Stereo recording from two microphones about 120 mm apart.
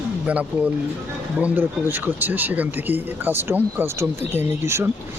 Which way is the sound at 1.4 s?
15° right (ahead or behind).